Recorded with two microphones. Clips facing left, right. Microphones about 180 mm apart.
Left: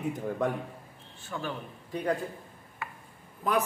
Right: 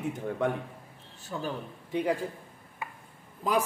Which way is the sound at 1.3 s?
25° right (ahead or behind).